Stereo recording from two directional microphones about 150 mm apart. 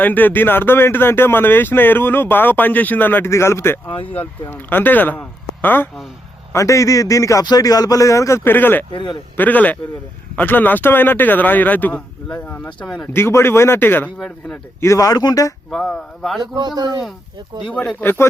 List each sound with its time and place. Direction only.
0.0 s a man's voice: 10° left (ahead or behind)
8.9 s a man's voice: 30° left (ahead or behind)
9.3 s speech: 10° left (ahead or behind)
13.1 s speech: 15° left (ahead or behind)
14.8 s a man's voice: 20° left (ahead or behind)
15.7 s speech: 5° left (ahead or behind)
16.4 s speech: 30° right (ahead or behind)
17.7 s speech: 10° left (ahead or behind)